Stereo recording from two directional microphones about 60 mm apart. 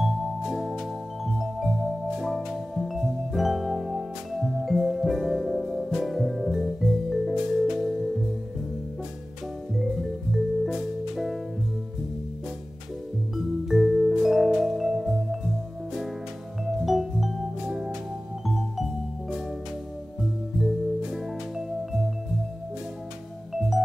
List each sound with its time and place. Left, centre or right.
0.0 s music: centre
9.8 s music: centre
13.4 s vibraphone: centre
16.6 s music: centre
20.6 s music: centre
23.5 s music: centre